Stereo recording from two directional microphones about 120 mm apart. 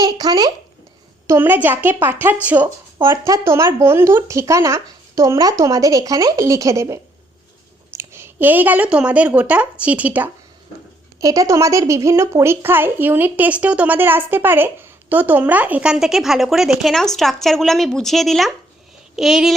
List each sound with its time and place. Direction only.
0.0 s speech: 35° right (ahead or behind)
1.3 s a woman's voice: 15° right (ahead or behind)
11.2 s speech: 30° right (ahead or behind); by 19.5 s 5° right (ahead or behind)